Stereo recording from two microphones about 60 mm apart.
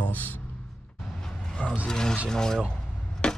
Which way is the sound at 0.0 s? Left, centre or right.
Left.